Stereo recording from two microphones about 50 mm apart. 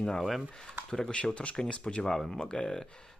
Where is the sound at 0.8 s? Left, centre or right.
Centre.